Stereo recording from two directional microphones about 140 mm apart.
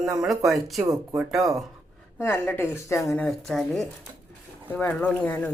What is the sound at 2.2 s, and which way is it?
Speech, 15° left (ahead or behind).